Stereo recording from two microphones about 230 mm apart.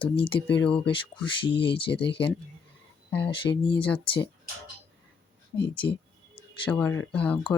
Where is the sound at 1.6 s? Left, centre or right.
Left.